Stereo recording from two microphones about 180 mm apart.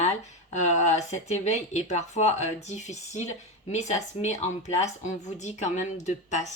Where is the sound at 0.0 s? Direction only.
40° left (ahead or behind).